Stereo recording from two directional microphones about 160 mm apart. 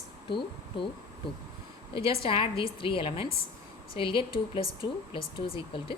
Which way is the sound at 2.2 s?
35° left (ahead or behind).